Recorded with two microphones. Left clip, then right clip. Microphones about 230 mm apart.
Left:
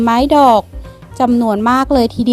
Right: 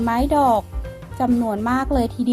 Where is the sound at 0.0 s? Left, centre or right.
Left.